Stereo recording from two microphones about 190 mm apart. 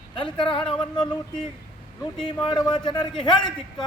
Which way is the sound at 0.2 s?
25° left (ahead or behind).